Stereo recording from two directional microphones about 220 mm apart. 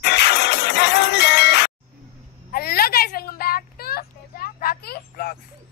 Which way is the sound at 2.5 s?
45° left (ahead or behind).